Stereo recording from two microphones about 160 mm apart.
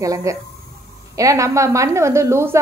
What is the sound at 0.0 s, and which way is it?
A woman's voice, 20° right (ahead or behind).